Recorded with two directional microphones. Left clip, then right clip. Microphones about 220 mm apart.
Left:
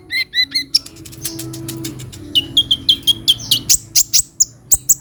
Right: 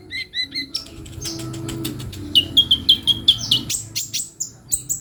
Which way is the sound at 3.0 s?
40° left (ahead or behind).